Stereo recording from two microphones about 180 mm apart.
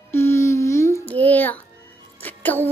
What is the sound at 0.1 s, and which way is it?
Music, 15° left (ahead or behind).